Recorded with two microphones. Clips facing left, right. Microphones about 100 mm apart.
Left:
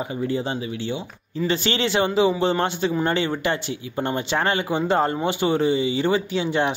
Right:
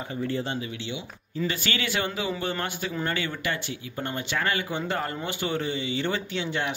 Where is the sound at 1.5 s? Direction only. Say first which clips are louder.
Left 10 dB; 25° left (ahead or behind).